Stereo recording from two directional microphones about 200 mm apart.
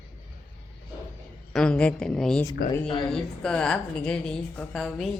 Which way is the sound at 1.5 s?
5° left (ahead or behind).